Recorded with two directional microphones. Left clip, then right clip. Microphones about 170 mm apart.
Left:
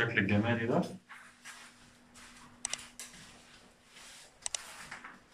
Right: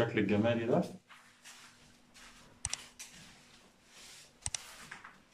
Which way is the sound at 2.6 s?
Centre (ahead or behind).